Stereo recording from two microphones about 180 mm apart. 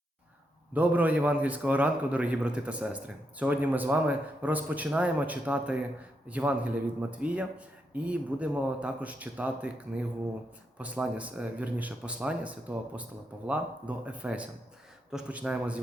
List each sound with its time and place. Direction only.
0.7 s a man's voice: 10° right (ahead or behind)